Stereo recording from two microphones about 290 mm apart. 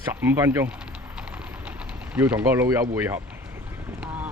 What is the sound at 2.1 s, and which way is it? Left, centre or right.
Speech, centre.